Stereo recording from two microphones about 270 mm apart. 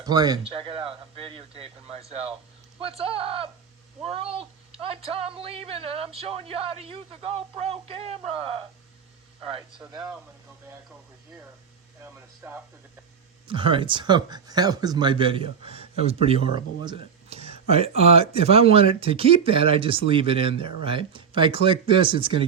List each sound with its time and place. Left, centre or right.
0.0 s speech: centre
9.7 s speech: centre
12.0 s speech: centre
13.5 s speech: centre